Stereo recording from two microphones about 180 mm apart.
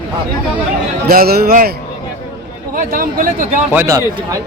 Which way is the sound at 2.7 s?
50° right (ahead or behind).